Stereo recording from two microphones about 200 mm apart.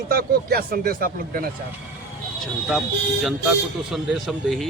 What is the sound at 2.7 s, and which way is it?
A man's voice, centre (ahead or behind).